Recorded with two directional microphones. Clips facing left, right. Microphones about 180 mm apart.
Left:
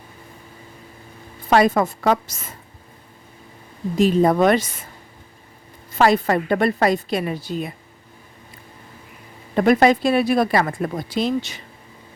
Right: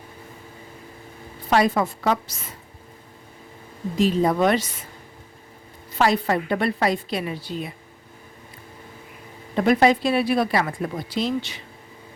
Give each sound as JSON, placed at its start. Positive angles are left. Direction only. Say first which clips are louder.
{"t": 1.5, "sound": "speech", "louder": "left 3 dB", "side_deg": 50}
{"t": 3.9, "sound": "speech", "louder": "left 4 dB", "side_deg": 50}
{"t": 5.9, "sound": "speech", "louder": "left 4 dB", "side_deg": 50}
{"t": 9.6, "sound": "speech", "louder": "left 3 dB", "side_deg": 50}